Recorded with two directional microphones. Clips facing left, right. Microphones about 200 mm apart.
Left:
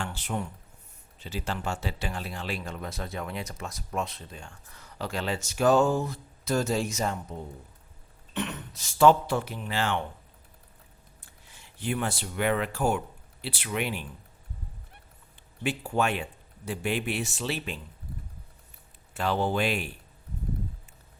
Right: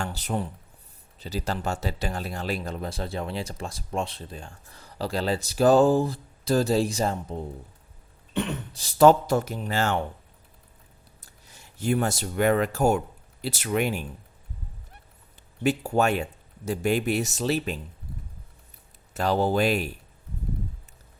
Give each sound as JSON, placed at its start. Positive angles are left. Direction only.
{"t": 0.0, "sound": "speech", "side_deg": -40}
{"t": 11.2, "sound": "speech", "side_deg": -40}
{"t": 15.6, "sound": "speech", "side_deg": -40}
{"t": 19.1, "sound": "speech", "side_deg": -40}